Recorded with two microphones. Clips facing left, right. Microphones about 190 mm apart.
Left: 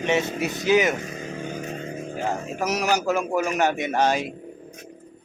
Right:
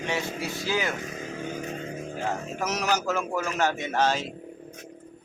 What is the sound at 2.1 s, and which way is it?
A man's voice, 15° left (ahead or behind).